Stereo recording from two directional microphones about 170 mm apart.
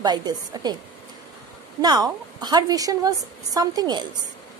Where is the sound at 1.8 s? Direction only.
25° right (ahead or behind).